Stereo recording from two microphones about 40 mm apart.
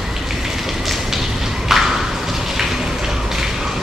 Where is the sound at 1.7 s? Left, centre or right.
Centre.